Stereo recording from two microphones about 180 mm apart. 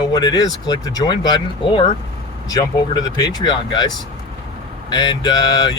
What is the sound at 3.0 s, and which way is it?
Speech, 20° left (ahead or behind).